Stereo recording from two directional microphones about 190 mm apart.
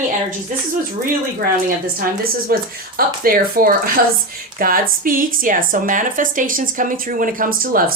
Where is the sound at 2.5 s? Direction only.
50° right (ahead or behind).